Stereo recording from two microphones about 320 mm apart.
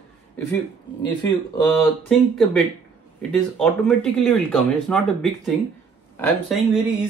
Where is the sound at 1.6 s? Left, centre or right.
Centre.